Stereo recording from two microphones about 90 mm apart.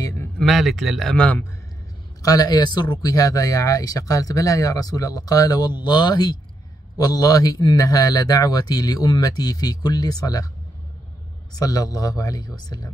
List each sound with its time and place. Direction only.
0.4 s a man's voice: centre (ahead or behind)
2.2 s a man's voice: 45° left (ahead or behind)
11.5 s a man's voice: 45° left (ahead or behind)